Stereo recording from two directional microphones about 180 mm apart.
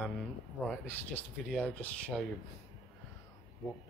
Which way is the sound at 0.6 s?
10° left (ahead or behind).